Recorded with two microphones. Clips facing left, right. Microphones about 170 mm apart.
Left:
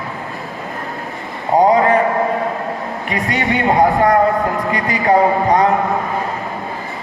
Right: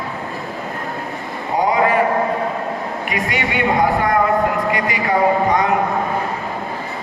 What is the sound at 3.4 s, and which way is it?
Speech, 40° left (ahead or behind).